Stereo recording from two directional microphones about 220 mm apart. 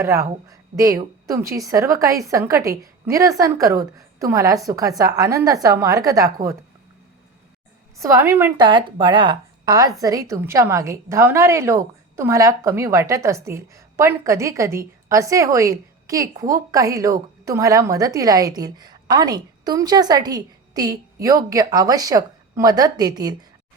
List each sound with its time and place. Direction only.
0.0 s a woman's voice: 15° right (ahead or behind)
7.9 s a woman's voice: 15° right (ahead or behind)